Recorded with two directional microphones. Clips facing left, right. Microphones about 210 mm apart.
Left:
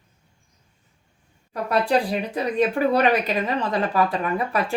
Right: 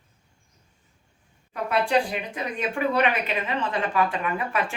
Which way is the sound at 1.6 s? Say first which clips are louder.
Left 2 dB; 40° left (ahead or behind).